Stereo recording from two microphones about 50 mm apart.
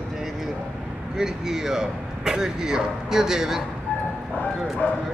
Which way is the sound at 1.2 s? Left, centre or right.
Centre.